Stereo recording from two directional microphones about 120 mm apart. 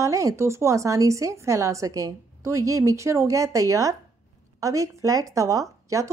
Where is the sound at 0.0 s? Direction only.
25° right (ahead or behind).